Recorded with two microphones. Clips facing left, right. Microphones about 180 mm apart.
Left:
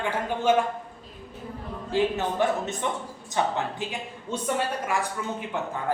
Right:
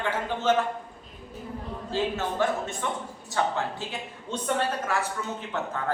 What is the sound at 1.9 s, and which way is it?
A woman's voice, 15° left (ahead or behind).